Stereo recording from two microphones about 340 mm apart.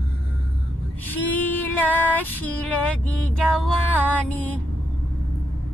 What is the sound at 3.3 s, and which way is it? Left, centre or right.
Music, centre.